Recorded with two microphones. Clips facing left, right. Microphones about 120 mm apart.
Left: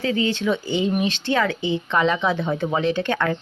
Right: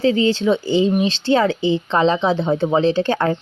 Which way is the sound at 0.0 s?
30° right (ahead or behind).